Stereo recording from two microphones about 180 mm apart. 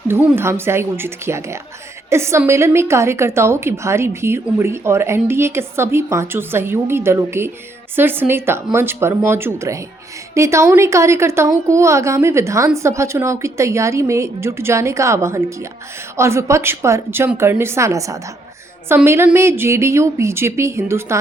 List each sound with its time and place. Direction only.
0.1 s a woman's voice: 15° right (ahead or behind)